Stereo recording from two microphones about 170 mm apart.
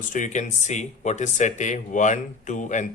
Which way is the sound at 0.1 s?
45° left (ahead or behind).